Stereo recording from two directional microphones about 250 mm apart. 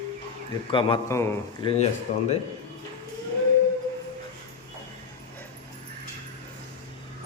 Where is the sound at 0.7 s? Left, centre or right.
Centre.